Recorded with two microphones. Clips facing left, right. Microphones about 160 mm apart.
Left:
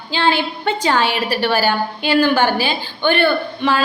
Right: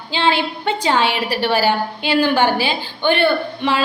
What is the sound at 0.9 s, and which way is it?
A woman's voice, 25° right (ahead or behind).